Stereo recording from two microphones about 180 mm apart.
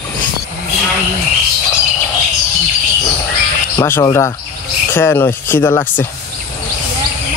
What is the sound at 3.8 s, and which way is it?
Speech, 15° left (ahead or behind).